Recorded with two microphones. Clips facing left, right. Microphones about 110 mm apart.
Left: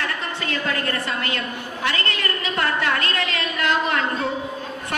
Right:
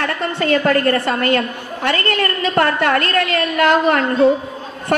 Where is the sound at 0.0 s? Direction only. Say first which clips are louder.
Right 8 dB; 55° right (ahead or behind).